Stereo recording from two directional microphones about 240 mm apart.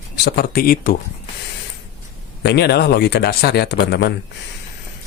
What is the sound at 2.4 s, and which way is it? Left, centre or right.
Speech, left.